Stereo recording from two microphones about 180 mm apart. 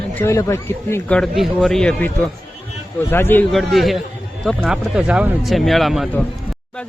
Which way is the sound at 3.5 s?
Centre (ahead or behind).